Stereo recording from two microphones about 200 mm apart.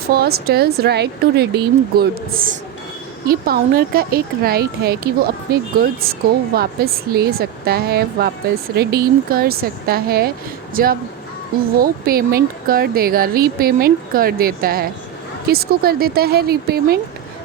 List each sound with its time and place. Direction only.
0.1 s speech: 50° right (ahead or behind)